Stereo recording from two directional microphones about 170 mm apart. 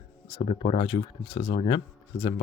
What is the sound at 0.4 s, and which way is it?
Speech, 35° left (ahead or behind).